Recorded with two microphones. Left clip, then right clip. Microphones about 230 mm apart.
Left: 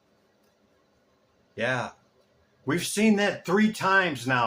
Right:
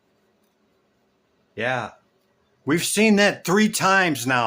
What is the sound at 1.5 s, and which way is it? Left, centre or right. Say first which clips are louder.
Speech: right 3 dB; right.